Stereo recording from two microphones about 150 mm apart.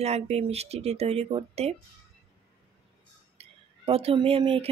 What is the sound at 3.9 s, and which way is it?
Speech, 40° right (ahead or behind).